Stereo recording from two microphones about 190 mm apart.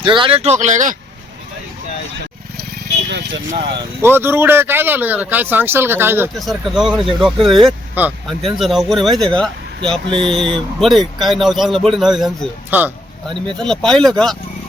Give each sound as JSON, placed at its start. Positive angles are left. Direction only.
{"t": 0.0, "sound": "speech", "side_deg": -25}
{"t": 2.6, "sound": "vehicle", "side_deg": -55}
{"t": 3.5, "sound": "speech", "side_deg": -20}
{"t": 4.0, "sound": "speech", "side_deg": -10}
{"t": 6.4, "sound": "speech", "side_deg": 0}
{"t": 10.1, "sound": "speech", "side_deg": -25}
{"t": 10.5, "sound": "speech", "side_deg": 0}